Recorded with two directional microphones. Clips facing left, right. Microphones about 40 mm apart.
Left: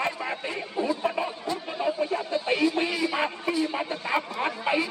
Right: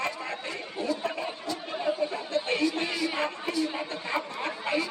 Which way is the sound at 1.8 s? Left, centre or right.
Centre.